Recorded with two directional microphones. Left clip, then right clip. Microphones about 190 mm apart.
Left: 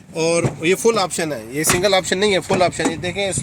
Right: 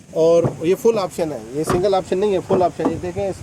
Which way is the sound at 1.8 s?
40° left (ahead or behind).